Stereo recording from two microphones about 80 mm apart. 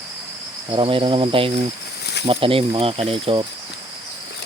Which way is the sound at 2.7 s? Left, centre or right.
Right.